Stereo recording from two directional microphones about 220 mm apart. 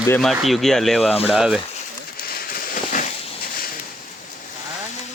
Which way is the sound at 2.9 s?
35° left (ahead or behind).